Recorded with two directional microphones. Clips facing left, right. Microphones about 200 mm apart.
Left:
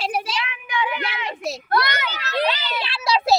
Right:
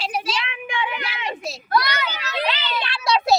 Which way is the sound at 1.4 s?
60° left (ahead or behind).